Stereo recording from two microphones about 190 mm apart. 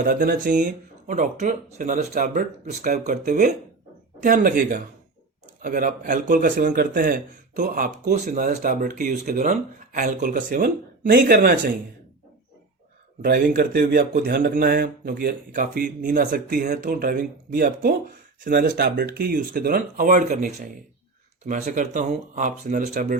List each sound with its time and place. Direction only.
0.0 s a man's voice: 45° right (ahead or behind)
13.2 s a man's voice: 55° right (ahead or behind)